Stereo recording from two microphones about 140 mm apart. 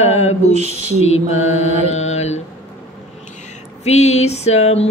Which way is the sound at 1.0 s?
50° left (ahead or behind).